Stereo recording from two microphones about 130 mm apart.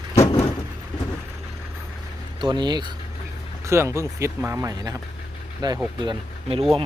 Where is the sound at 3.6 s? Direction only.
20° right (ahead or behind).